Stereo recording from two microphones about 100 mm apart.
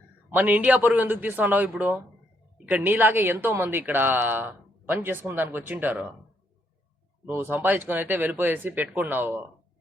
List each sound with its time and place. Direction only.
0.3 s a man's voice: 20° right (ahead or behind)
7.3 s speech: 20° right (ahead or behind)